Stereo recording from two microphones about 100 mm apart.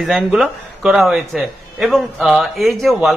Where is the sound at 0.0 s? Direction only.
Centre (ahead or behind).